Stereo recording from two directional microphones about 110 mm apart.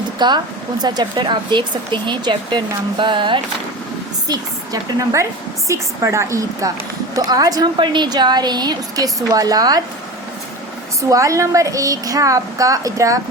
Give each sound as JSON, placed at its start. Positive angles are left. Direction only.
{"t": 0.2, "sound": "speech", "side_deg": -40}
{"t": 4.3, "sound": "a woman's voice", "side_deg": -35}
{"t": 11.1, "sound": "a woman's voice", "side_deg": -30}